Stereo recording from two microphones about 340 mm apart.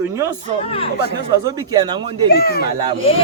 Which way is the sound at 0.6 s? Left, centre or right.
Centre.